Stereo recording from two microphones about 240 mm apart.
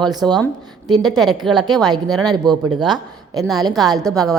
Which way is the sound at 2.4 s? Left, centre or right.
Centre.